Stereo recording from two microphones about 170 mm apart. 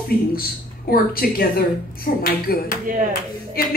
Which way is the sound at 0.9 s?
60° left (ahead or behind).